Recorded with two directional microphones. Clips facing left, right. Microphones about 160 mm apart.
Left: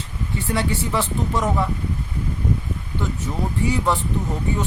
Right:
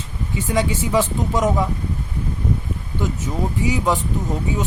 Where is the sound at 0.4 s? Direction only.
15° right (ahead or behind).